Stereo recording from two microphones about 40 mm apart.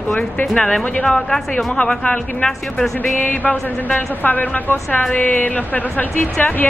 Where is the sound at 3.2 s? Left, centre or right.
Left.